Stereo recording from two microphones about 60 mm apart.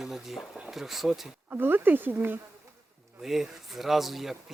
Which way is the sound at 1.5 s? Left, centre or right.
Right.